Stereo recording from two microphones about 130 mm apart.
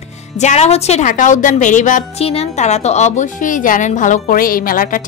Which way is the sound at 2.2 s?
50° left (ahead or behind).